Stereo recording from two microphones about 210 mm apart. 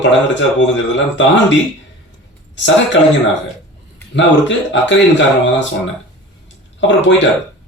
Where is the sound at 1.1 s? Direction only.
60° left (ahead or behind).